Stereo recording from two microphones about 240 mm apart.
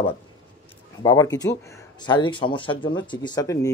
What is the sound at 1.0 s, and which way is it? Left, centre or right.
Speech, centre.